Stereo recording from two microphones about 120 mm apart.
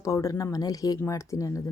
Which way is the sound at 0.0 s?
25° left (ahead or behind).